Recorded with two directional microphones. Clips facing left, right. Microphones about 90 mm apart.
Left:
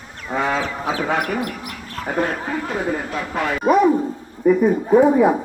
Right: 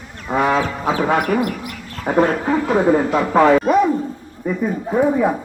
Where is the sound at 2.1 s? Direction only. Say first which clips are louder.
Right 6 dB; 20° right (ahead or behind).